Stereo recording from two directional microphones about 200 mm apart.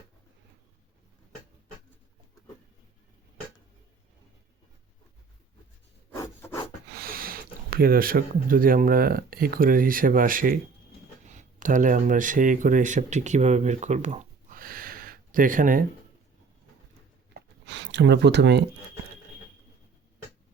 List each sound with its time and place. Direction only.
6.1 s rub: 15° left (ahead or behind)
6.9 s speech: 45° right (ahead or behind)
17.3 s a sound: 60° right (ahead or behind)